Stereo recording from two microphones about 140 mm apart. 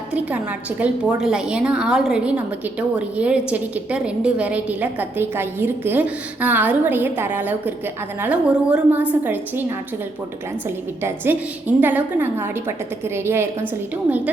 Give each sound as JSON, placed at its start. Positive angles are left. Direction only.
{"t": 0.1, "sound": "a woman's voice", "side_deg": -10}
{"t": 11.3, "sound": "a woman's voice", "side_deg": -15}